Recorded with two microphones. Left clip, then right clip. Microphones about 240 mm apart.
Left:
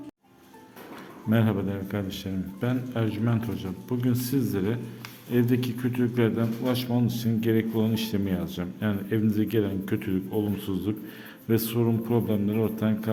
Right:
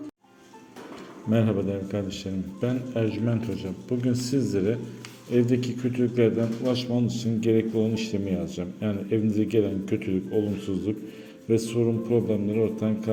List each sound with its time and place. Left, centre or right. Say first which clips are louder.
1.3 s a man's voice: right 2 dB; centre